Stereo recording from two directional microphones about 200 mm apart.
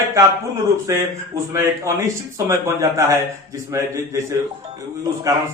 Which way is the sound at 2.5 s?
15° right (ahead or behind).